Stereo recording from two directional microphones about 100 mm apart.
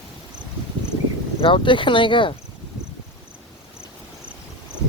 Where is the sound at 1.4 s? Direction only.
55° left (ahead or behind).